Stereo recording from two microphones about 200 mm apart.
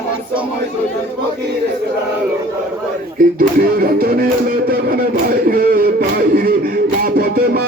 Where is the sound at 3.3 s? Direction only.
45° right (ahead or behind).